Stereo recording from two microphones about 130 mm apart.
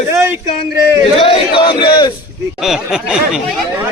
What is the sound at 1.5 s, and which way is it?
Crowd, 40° left (ahead or behind).